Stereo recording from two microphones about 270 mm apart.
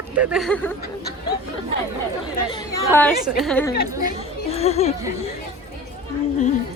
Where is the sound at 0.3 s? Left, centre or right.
Centre.